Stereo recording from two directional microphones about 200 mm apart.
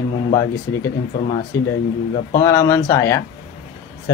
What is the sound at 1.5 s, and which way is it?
Speech, 15° left (ahead or behind).